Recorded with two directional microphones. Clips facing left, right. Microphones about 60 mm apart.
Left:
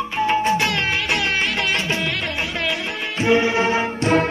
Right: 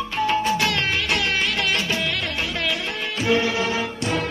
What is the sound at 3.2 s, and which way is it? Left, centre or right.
Music, left.